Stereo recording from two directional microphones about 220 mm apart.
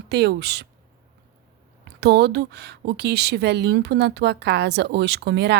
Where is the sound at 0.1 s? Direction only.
50° right (ahead or behind).